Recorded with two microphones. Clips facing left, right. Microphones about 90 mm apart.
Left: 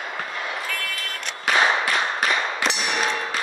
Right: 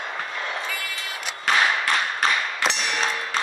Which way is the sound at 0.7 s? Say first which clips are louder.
Left 1 dB; 5° right (ahead or behind).